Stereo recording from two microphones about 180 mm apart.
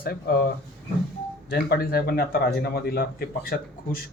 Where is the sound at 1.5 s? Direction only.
60° left (ahead or behind).